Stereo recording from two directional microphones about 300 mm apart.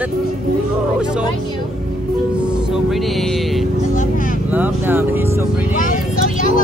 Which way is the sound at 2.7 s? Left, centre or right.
Centre.